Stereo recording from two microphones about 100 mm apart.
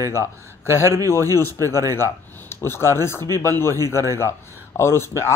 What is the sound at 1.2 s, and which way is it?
Speech, 35° right (ahead or behind).